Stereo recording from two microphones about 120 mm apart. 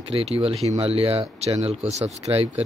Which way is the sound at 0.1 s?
55° right (ahead or behind).